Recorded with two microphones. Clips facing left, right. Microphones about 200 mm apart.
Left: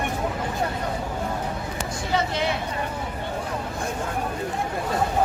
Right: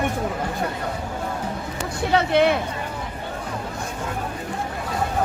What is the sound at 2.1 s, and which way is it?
Speech, 60° right (ahead or behind).